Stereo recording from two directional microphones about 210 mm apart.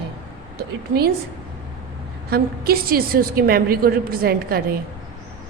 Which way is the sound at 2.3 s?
45° right (ahead or behind).